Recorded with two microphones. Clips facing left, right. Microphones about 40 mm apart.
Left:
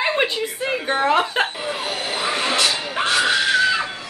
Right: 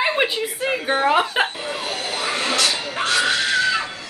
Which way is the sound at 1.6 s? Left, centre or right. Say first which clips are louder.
Left 1 dB; left.